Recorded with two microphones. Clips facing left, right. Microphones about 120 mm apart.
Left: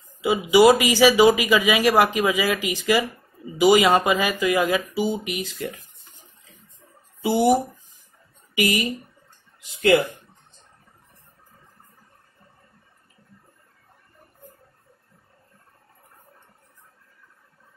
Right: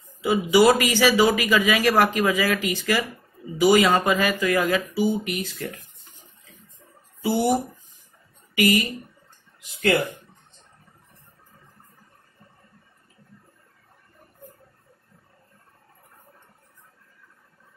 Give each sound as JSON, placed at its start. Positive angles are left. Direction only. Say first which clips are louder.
{"t": 0.2, "sound": "speech", "louder": "left 2 dB", "side_deg": 15}
{"t": 7.2, "sound": "speech", "louder": "left 3 dB", "side_deg": 15}